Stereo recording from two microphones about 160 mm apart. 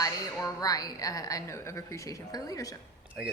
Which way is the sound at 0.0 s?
20° left (ahead or behind).